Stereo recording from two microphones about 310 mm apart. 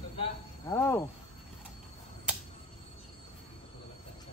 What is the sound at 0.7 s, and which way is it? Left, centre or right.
Speech, centre.